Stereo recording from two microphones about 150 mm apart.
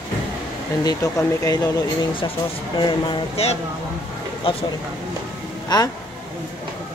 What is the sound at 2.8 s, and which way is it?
Speech, 30° left (ahead or behind).